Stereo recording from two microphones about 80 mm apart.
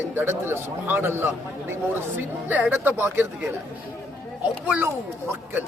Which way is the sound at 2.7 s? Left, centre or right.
Right.